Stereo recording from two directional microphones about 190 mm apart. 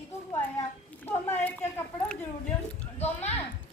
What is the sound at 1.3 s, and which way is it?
Speech, 10° left (ahead or behind).